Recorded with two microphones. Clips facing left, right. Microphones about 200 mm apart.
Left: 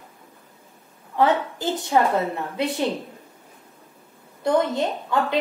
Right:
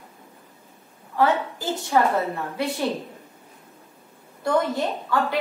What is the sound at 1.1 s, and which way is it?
A woman's voice, 20° left (ahead or behind).